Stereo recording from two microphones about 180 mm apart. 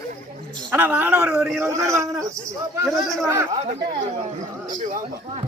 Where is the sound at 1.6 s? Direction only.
15° right (ahead or behind).